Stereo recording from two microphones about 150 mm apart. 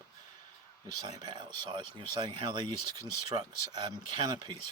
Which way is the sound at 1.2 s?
30° right (ahead or behind).